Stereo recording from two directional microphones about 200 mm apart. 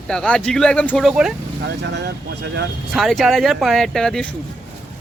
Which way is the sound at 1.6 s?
60° right (ahead or behind).